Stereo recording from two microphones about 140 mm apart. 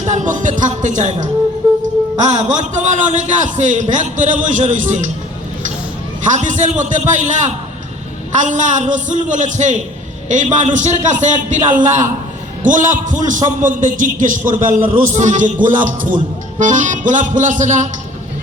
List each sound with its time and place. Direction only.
0.0 s a man's voice: 60° right (ahead or behind)
2.3 s a man's voice: 60° right (ahead or behind)
6.2 s a man's voice: 60° right (ahead or behind)